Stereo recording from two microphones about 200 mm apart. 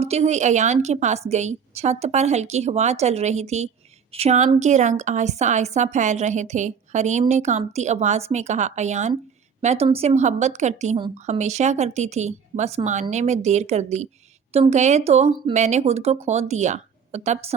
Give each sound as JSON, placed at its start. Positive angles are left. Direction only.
{"t": 0.0, "sound": "a woman's voice", "side_deg": -30}